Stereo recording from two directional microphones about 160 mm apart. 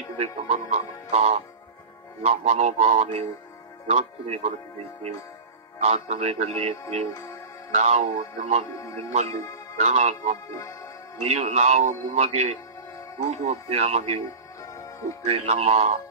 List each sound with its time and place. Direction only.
0.2 s speech: 45° right (ahead or behind)
5.8 s speech: 45° right (ahead or behind)
7.7 s speech: 45° right (ahead or behind)
8.6 s a man's voice: 20° left (ahead or behind)
9.8 s speech: 40° right (ahead or behind)
10.5 s music: 20° left (ahead or behind)
11.2 s speech: 45° right (ahead or behind)
14.6 s music: 20° left (ahead or behind)
15.2 s speech: 40° right (ahead or behind)